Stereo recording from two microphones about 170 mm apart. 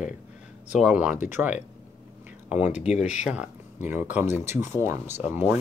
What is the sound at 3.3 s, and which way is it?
Speech, 10° right (ahead or behind).